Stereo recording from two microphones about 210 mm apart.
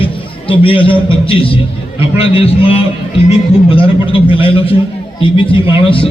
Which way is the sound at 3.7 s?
25° left (ahead or behind).